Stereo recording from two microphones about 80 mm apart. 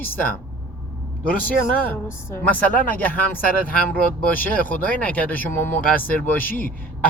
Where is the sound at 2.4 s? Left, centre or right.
Left.